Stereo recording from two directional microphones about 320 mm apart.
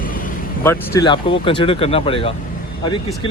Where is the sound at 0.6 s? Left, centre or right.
Centre.